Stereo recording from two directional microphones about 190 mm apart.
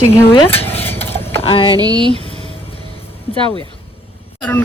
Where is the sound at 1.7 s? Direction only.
20° right (ahead or behind).